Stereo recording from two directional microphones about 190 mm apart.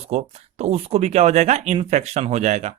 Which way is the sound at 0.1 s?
35° right (ahead or behind).